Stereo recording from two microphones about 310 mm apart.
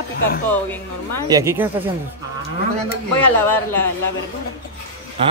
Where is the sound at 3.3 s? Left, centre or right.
Centre.